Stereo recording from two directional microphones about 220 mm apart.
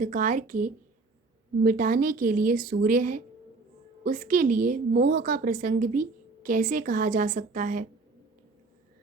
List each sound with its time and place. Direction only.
0.0 s a woman's voice: 35° right (ahead or behind)